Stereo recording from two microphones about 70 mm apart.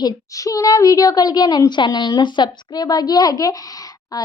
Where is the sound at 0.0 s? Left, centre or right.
Left.